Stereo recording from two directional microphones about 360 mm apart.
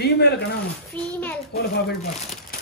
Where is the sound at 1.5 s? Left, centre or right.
Left.